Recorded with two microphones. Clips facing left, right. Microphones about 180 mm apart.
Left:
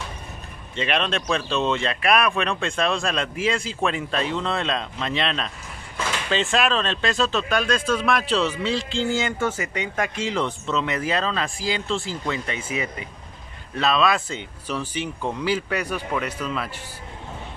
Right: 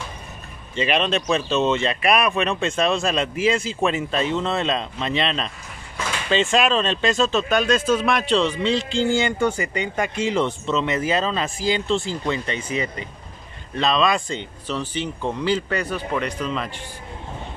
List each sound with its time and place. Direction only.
0.7 s speech: centre (ahead or behind)